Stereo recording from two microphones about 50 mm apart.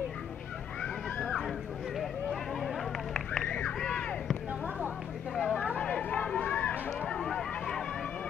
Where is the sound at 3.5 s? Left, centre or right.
Left.